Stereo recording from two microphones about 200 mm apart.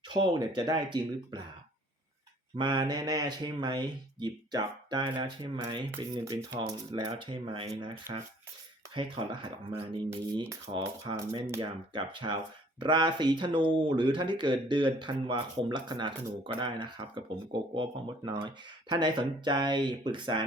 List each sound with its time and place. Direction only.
0.1 s speech: 20° right (ahead or behind)
2.6 s speech: 20° right (ahead or behind)
10.5 s speech: 25° right (ahead or behind)